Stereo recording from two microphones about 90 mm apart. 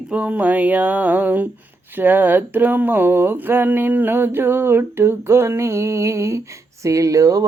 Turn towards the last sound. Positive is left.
turn(degrees=-40)  # may be behind; listen again after turning